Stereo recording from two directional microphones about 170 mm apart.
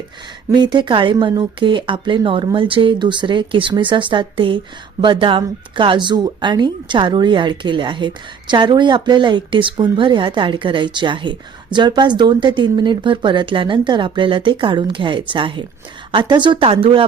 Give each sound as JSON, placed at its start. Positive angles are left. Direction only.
{"t": 0.5, "sound": "speech", "side_deg": -25}